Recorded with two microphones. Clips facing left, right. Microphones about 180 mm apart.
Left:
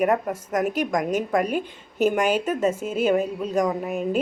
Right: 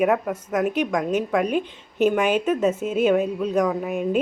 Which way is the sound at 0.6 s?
5° left (ahead or behind).